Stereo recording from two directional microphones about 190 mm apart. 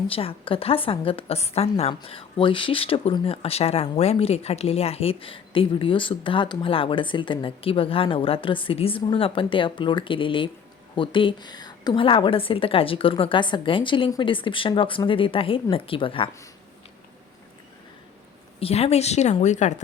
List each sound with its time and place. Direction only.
0.1 s a woman's voice: 30° left (ahead or behind)
18.6 s speech: 35° left (ahead or behind)